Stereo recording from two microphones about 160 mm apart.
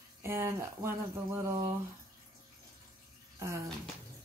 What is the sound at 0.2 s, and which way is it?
Speech, 15° right (ahead or behind).